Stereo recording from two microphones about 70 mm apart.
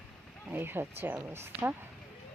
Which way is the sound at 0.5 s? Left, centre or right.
Right.